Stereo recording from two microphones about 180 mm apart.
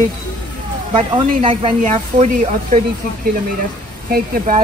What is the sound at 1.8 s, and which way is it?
Speech, 40° right (ahead or behind).